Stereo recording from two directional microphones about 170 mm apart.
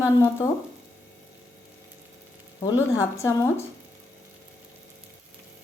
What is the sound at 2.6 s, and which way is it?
Speech, 20° left (ahead or behind).